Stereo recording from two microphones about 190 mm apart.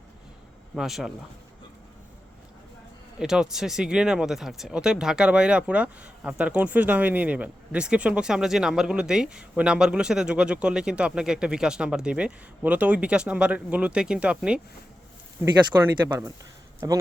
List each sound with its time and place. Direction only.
0.8 s speech: centre (ahead or behind)
3.2 s speech: 5° right (ahead or behind)
15.8 s a man's voice: 15° right (ahead or behind)